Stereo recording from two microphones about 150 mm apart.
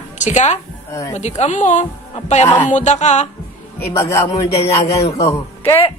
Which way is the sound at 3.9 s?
20° left (ahead or behind).